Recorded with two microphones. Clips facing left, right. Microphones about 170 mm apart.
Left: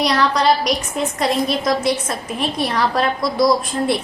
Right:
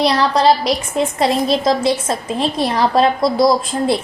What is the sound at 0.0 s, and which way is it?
A woman's voice, 30° right (ahead or behind).